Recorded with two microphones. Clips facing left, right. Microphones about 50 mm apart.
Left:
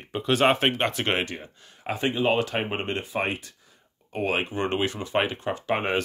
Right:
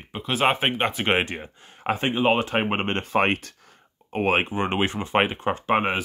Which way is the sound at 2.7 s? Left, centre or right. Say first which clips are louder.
Right 4 dB; right.